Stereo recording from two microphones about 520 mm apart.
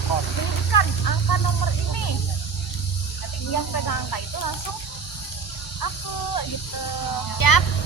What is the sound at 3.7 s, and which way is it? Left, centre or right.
Snake, left.